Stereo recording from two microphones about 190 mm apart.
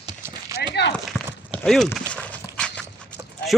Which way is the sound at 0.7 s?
65° left (ahead or behind).